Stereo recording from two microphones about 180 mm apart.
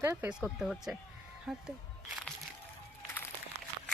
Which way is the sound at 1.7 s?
5° right (ahead or behind).